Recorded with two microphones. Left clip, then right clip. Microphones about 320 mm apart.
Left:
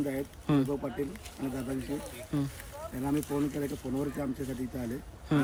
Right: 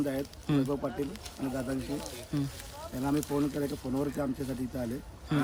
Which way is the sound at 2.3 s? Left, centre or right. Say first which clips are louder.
Left 2 dB; centre.